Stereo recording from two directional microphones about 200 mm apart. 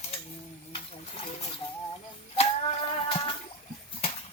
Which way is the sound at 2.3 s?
30° left (ahead or behind).